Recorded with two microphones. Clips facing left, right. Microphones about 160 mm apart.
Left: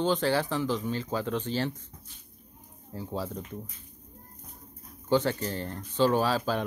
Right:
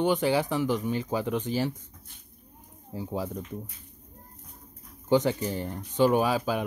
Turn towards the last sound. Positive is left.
turn(degrees=-10)  # may be behind; listen again after turning